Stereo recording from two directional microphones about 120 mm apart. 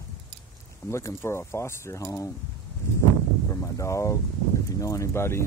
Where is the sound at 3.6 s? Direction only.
25° left (ahead or behind).